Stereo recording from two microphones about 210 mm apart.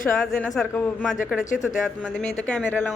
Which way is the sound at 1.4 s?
35° left (ahead or behind).